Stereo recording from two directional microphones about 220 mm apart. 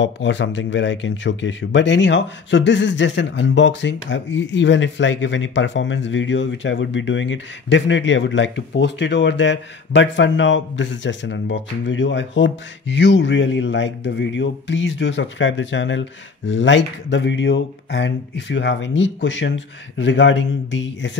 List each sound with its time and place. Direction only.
0.0 s speech: 55° left (ahead or behind)